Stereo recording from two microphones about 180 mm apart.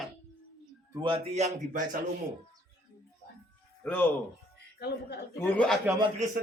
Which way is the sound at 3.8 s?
10° left (ahead or behind).